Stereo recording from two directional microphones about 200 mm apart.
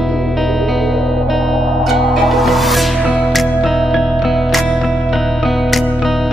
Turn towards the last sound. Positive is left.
turn(degrees=0)  # may be behind; listen again after turning